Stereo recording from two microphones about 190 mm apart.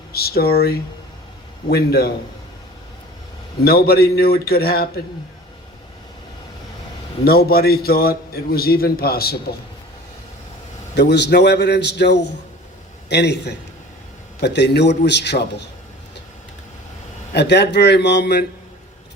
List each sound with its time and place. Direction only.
0.1 s a man's voice: 55° left (ahead or behind)
3.6 s a man's voice: 55° left (ahead or behind)
7.3 s a man's voice: 55° left (ahead or behind)
10.9 s a man's voice: 65° left (ahead or behind)
17.3 s a man's voice: 60° left (ahead or behind)